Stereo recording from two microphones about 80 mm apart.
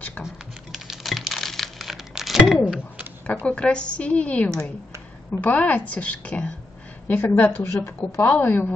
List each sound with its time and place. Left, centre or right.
0.2 s typing: centre
3.4 s a woman's voice: centre